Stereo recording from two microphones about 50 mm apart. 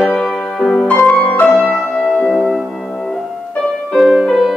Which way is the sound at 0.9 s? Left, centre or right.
Left.